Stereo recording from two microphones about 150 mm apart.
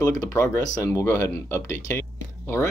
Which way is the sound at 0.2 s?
20° left (ahead or behind).